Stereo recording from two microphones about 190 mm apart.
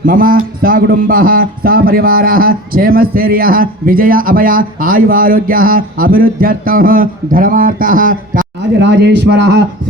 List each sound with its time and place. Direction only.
0.0 s speech: 50° right (ahead or behind)
8.8 s speech: 65° right (ahead or behind)